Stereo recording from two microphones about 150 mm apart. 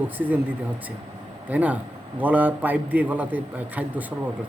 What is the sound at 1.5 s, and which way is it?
Speech, 10° right (ahead or behind).